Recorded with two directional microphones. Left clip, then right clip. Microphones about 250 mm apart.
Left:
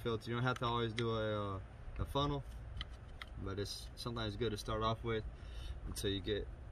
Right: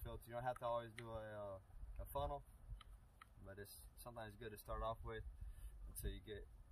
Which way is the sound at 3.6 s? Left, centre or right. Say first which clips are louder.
Left 16 dB; right.